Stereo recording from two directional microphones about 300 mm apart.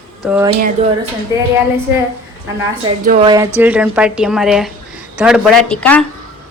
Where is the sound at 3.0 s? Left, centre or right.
Right.